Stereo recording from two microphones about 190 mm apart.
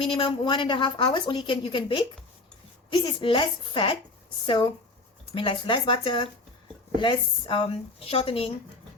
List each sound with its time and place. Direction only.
0.0 s a woman's voice: 25° left (ahead or behind)